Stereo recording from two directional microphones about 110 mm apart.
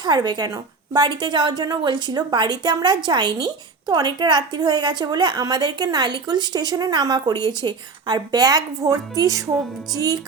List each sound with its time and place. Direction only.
0.0 s a woman's voice: 40° right (ahead or behind)